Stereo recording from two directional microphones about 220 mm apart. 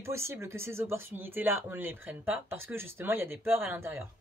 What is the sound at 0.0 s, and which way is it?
Speech, 10° right (ahead or behind).